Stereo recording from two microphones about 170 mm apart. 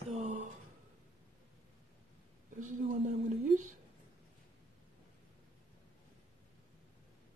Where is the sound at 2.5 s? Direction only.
50° right (ahead or behind).